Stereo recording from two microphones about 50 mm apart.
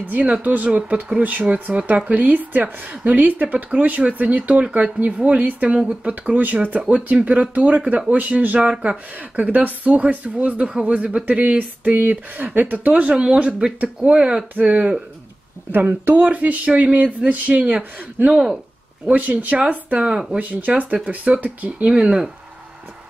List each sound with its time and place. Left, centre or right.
0.0 s a woman's voice: right
8.5 s a woman's voice: centre
9.3 s a woman's voice: right
15.7 s speech: right
18.3 s speech: centre
19.0 s speech: right
20.0 s speech: centre
20.3 s a woman's voice: right